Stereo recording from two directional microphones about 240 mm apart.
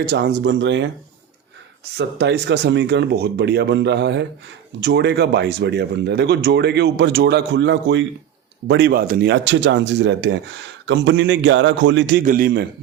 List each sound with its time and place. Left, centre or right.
0.0 s speech: right
2.0 s speech: right
12.2 s a man's voice: right